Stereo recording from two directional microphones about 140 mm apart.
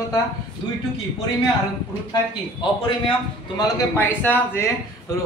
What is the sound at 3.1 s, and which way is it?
A man's voice, 30° left (ahead or behind).